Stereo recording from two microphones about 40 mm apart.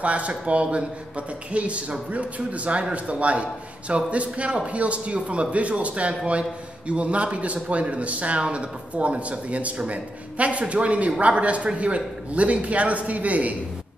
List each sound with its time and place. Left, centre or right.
0.0 s speech: right